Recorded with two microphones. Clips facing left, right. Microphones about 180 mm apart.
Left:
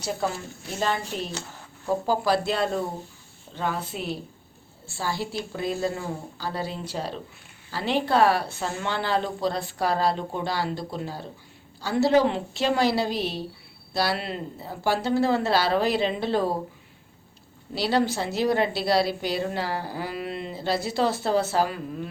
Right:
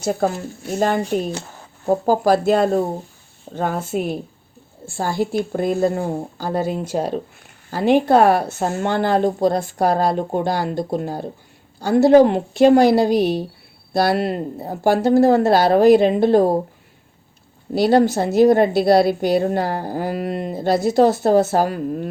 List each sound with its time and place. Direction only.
0.0 s a woman's voice: 50° right (ahead or behind)
17.7 s a woman's voice: 50° right (ahead or behind)